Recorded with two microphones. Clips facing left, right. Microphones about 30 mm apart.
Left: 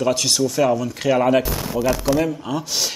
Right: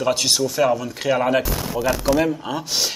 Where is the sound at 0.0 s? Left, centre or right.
Centre.